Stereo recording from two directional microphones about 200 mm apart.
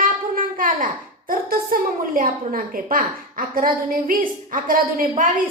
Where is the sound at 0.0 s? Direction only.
40° right (ahead or behind).